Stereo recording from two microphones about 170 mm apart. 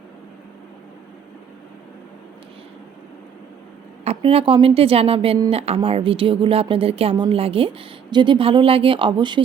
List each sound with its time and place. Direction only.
4.0 s speech: 35° right (ahead or behind)